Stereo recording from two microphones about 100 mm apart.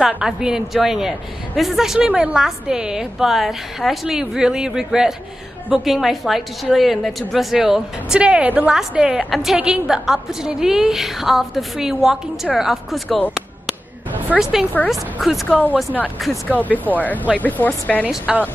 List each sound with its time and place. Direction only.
0.0 s a woman's voice: 5° right (ahead or behind)
14.4 s a woman's voice: 5° right (ahead or behind)
16.4 s speech: 15° left (ahead or behind)
18.1 s a woman's voice: 10° right (ahead or behind)